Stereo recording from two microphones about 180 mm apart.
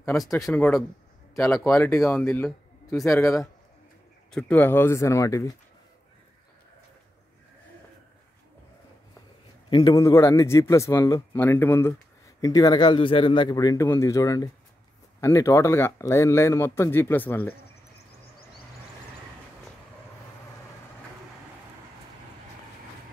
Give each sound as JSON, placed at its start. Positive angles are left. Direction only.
{"t": 0.4, "sound": "speech", "side_deg": 10}
{"t": 9.7, "sound": "a man's voice", "side_deg": 30}
{"t": 9.9, "sound": "speech", "side_deg": 15}